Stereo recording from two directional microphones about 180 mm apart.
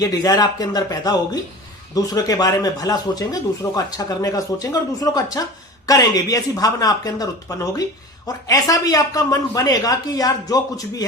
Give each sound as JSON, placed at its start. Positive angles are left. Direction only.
{"t": 0.0, "sound": "speech", "side_deg": 20}